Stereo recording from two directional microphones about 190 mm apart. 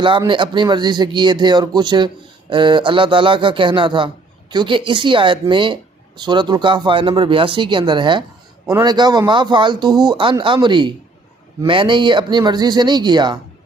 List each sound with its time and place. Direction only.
0.3 s a woman's voice: 25° right (ahead or behind)